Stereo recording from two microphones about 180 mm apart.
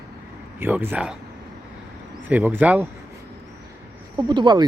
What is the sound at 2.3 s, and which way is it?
Speech, 10° right (ahead or behind).